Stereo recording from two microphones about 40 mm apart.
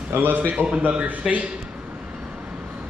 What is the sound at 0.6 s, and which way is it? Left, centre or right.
Speech, left.